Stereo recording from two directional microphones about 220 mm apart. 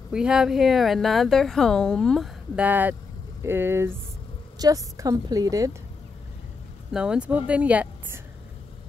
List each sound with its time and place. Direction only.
0.1 s speech: 5° right (ahead or behind)
6.9 s speech: 5° right (ahead or behind)